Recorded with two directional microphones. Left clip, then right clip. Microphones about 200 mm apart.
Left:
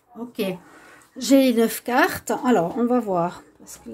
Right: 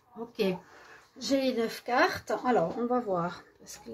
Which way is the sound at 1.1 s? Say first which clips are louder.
Left 11 dB; 55° left (ahead or behind).